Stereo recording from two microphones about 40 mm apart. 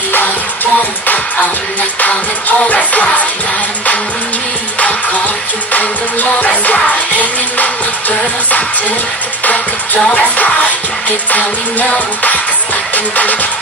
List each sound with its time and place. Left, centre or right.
1.0 s music: left
5.7 s music: left
10.1 s music: left
12.9 s music: left